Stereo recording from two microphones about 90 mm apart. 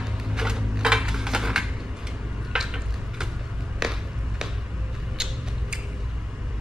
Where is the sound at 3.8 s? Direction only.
5° right (ahead or behind).